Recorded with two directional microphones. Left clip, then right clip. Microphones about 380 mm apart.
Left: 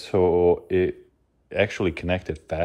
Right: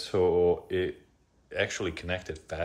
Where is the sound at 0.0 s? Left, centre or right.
Centre.